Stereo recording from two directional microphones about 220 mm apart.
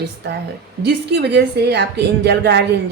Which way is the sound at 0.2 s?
50° right (ahead or behind).